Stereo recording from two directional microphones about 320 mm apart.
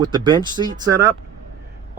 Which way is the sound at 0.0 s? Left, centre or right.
Centre.